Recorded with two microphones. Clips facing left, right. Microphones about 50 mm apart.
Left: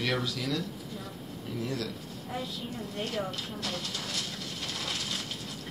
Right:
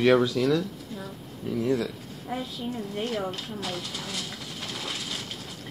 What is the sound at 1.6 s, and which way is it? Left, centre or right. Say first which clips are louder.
Speech: right 9 dB; right.